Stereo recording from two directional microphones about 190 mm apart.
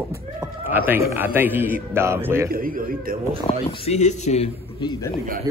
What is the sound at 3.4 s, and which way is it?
Speech, 30° left (ahead or behind).